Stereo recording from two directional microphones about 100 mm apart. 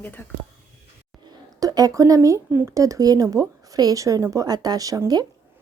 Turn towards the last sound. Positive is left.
turn(degrees=-40)  # may be behind; listen again after turning